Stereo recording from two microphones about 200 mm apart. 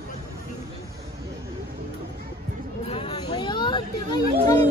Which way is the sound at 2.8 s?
30° left (ahead or behind).